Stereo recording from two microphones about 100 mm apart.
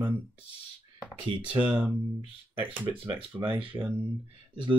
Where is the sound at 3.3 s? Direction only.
15° right (ahead or behind).